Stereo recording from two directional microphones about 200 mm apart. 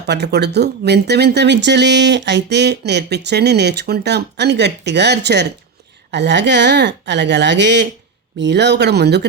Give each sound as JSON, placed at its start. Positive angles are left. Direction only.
{"t": 0.0, "sound": "speech", "side_deg": -55}